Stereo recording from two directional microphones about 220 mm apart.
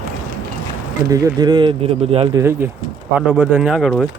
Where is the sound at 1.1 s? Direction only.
15° right (ahead or behind).